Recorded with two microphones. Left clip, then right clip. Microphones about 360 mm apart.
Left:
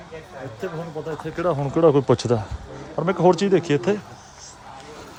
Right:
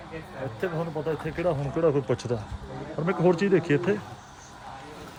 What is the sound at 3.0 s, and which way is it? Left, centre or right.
Speech, centre.